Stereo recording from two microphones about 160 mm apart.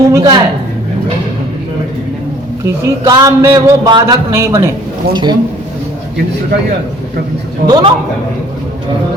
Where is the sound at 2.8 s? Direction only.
20° right (ahead or behind).